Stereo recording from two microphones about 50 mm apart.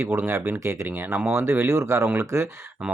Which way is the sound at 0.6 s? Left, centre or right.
Right.